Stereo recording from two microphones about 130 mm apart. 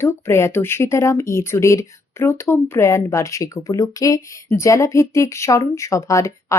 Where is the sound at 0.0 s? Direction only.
20° left (ahead or behind).